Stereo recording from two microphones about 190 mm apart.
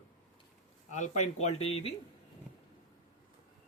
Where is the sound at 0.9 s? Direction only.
40° left (ahead or behind).